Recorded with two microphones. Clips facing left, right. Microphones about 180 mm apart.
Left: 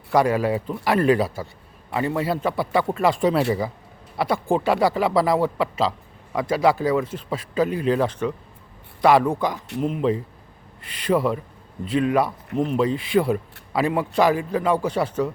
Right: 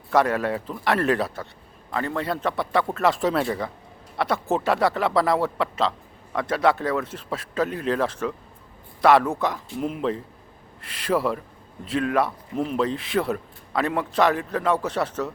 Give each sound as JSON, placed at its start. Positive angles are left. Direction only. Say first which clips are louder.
{"t": 0.1, "sound": "a man's voice", "louder": "left 2 dB", "side_deg": 0}
{"t": 9.6, "sound": "speech", "louder": "left 3 dB", "side_deg": 70}
{"t": 9.8, "sound": "a man's voice", "louder": "left 4 dB", "side_deg": 0}